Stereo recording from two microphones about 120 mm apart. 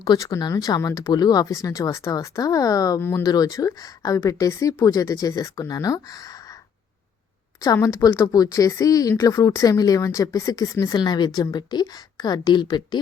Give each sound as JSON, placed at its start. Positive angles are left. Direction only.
{"t": 0.2, "sound": "speech", "side_deg": 30}
{"t": 3.0, "sound": "speech", "side_deg": 20}
{"t": 3.2, "sound": "speech", "side_deg": 30}
{"t": 7.6, "sound": "speech", "side_deg": 30}